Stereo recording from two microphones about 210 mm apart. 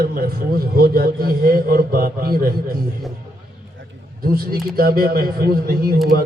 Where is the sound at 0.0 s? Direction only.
45° right (ahead or behind).